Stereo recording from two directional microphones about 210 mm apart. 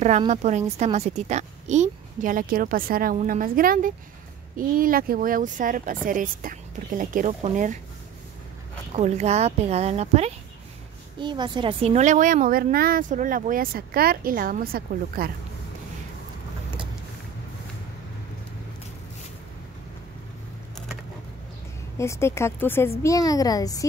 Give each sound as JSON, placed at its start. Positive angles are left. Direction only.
{"t": 0.3, "sound": "a woman's voice", "side_deg": -35}
{"t": 8.9, "sound": "a woman's voice", "side_deg": -30}
{"t": 11.1, "sound": "a woman's voice", "side_deg": -20}
{"t": 21.9, "sound": "speech", "side_deg": 15}